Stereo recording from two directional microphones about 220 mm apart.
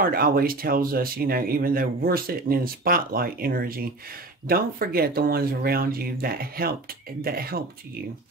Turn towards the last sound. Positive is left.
turn(degrees=-45)  # may be behind; listen again after turning